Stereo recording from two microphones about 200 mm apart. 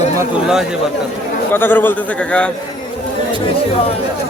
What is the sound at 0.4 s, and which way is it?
Speech, 5° right (ahead or behind).